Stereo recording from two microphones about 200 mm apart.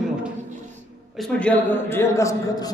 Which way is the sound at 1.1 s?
5° left (ahead or behind).